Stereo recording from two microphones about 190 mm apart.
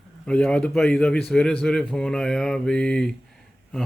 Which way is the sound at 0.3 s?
5° left (ahead or behind).